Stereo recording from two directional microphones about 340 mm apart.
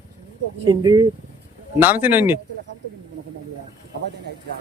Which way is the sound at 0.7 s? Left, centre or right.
Centre.